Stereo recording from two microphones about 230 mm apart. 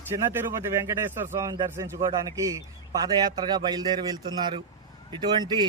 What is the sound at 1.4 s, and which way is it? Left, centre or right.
Speech, centre.